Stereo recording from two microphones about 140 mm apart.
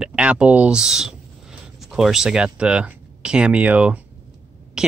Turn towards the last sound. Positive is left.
turn(degrees=-5)  # may be behind; listen again after turning